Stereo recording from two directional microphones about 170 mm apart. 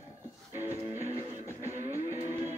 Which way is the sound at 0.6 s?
40° right (ahead or behind).